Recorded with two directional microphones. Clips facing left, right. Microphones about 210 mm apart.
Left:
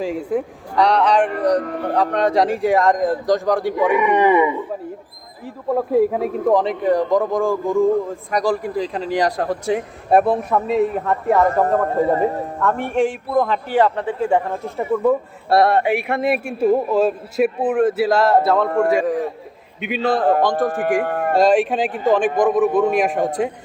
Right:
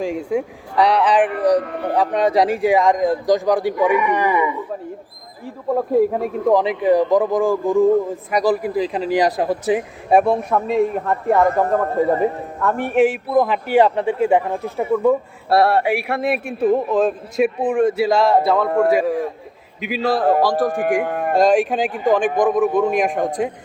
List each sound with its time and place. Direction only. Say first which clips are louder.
0.0 s a man's voice: even; 5° left (ahead or behind)
3.9 s speech: left 3 dB; 25° left (ahead or behind)
5.7 s a man's voice: even; 5° left (ahead or behind)